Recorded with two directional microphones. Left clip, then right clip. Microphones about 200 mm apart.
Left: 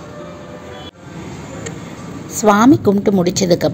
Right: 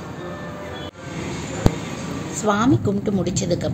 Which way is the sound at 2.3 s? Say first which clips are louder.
Left 9 dB; 40° left (ahead or behind).